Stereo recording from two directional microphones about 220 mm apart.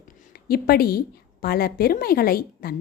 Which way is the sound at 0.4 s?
45° left (ahead or behind).